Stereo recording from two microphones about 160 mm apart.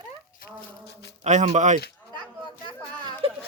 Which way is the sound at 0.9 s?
90° left.